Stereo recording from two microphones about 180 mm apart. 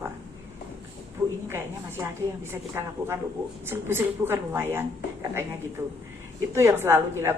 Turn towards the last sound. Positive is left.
turn(degrees=-15)  # may be behind; listen again after turning